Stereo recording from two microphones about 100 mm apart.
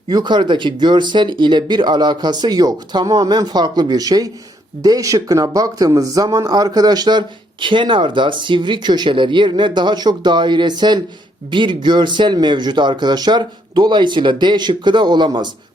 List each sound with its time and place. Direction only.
0.1 s speech: 45° right (ahead or behind)